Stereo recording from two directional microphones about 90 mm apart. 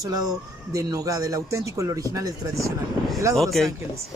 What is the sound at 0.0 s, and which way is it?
Speech, 45° right (ahead or behind).